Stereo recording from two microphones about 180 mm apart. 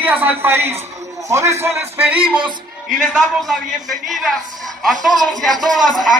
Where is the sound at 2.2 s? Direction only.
25° right (ahead or behind).